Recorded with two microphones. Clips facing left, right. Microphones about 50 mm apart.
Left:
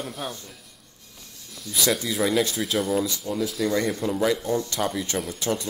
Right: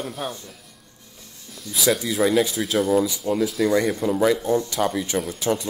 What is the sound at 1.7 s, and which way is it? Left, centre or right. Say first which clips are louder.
A man's voice: right 3 dB; centre.